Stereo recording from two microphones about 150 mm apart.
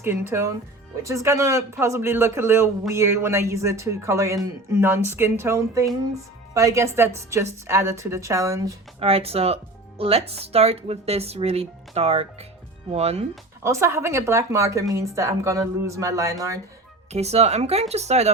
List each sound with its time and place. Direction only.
0.0 s speech: 15° right (ahead or behind)
9.0 s speech: 40° right (ahead or behind)
13.6 s speech: 20° right (ahead or behind)
17.1 s speech: 45° right (ahead or behind)